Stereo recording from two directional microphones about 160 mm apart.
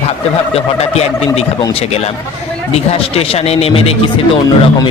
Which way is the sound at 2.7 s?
40° left (ahead or behind).